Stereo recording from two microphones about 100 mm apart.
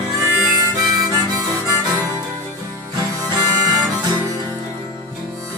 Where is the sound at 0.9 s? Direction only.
40° right (ahead or behind).